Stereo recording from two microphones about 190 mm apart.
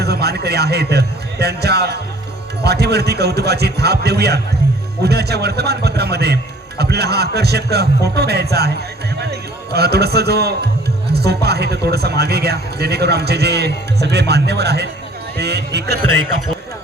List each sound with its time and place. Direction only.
0.0 s a man's voice: 60° right (ahead or behind)